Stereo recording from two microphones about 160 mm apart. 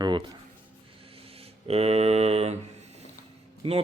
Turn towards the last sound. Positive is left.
turn(degrees=-35)  # may be behind; listen again after turning